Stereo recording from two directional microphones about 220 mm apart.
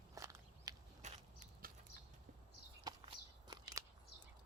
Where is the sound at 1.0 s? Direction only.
30° right (ahead or behind).